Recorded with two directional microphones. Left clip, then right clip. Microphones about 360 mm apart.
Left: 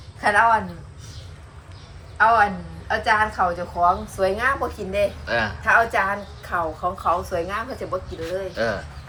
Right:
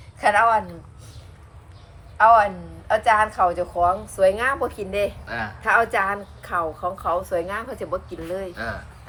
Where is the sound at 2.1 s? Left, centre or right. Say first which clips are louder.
Right 2 dB; right.